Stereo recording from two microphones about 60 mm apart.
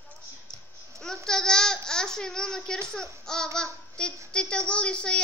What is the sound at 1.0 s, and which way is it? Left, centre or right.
A woman's voice, centre.